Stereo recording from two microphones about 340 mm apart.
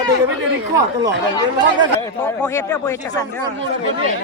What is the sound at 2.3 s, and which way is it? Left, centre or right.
Speech, centre.